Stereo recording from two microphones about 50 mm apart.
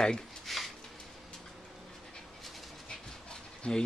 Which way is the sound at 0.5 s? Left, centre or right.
Centre.